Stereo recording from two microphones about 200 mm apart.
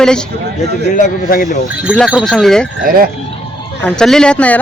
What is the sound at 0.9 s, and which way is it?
Speech, 45° left (ahead or behind).